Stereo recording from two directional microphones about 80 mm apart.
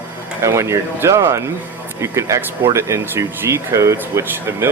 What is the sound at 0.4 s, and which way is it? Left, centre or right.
Speech, right.